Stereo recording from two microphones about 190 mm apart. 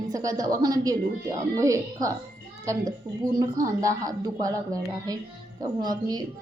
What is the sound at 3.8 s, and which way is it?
Speech, 20° right (ahead or behind).